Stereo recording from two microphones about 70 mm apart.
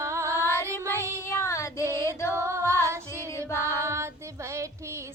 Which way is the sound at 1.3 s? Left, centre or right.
Left.